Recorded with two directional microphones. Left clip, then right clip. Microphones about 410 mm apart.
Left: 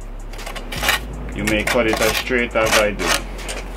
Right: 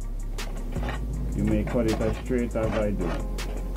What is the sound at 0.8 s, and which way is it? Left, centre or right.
Dishes, centre.